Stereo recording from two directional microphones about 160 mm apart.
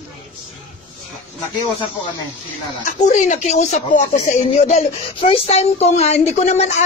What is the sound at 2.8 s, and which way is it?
Speech, 50° left (ahead or behind).